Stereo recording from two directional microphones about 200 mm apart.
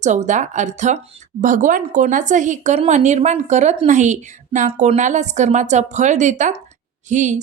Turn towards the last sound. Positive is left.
turn(degrees=-40)  # may be behind; listen again after turning